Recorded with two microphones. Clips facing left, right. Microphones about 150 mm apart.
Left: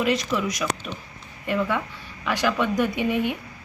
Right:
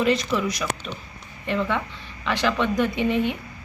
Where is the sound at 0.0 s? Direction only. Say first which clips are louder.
Right 2 dB; centre (ahead or behind).